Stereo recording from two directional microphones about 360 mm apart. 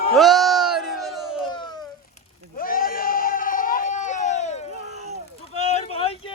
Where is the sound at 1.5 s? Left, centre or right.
Centre.